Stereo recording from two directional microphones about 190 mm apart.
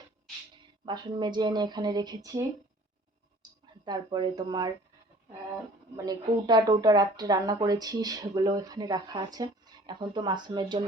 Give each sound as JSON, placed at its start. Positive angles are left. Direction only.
{"t": 0.9, "sound": "speech", "side_deg": -25}
{"t": 3.8, "sound": "speech", "side_deg": -20}
{"t": 6.1, "sound": "speech", "side_deg": -20}